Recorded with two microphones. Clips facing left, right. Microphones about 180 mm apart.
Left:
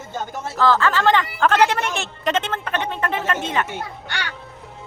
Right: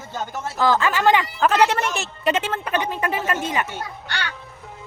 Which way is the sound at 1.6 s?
Centre (ahead or behind).